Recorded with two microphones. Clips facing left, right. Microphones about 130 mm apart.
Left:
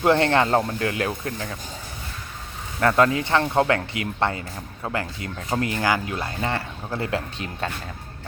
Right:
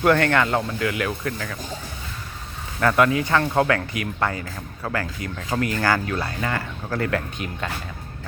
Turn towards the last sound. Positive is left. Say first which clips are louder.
# right 2 dB
turn(degrees=20)  # may be behind; listen again after turning